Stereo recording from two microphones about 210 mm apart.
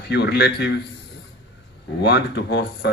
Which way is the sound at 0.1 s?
55° left (ahead or behind).